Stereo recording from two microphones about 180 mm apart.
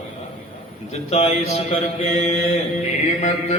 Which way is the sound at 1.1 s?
35° left (ahead or behind).